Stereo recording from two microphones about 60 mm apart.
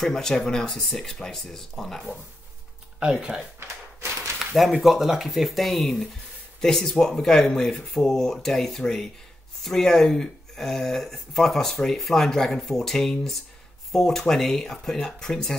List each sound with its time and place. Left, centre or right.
0.0 s speech: centre
3.0 s speech: centre
3.5 s a sound: right
4.6 s speech: centre